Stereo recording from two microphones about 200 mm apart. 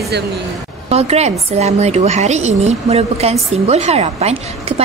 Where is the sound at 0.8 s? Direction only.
30° right (ahead or behind).